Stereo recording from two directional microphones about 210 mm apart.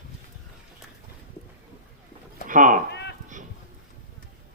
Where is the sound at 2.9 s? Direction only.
55° left (ahead or behind).